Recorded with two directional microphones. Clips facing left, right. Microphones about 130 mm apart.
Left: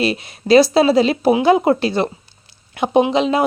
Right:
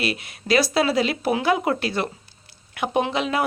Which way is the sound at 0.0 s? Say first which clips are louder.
Left 7 dB; 30° left (ahead or behind).